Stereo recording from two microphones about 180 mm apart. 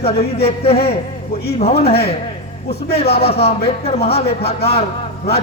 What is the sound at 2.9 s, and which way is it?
A man's voice, 35° left (ahead or behind).